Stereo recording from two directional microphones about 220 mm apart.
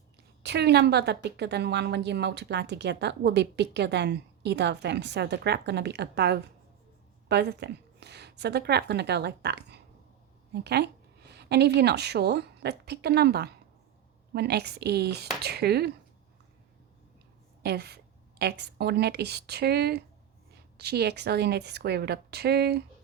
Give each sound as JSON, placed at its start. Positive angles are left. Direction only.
{"t": 0.4, "sound": "a woman's voice", "side_deg": -50}
{"t": 17.6, "sound": "a woman's voice", "side_deg": -45}